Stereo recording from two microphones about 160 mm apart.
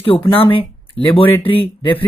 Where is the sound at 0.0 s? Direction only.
35° left (ahead or behind).